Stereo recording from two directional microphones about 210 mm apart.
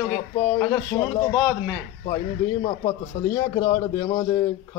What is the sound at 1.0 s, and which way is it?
Speech, 20° left (ahead or behind).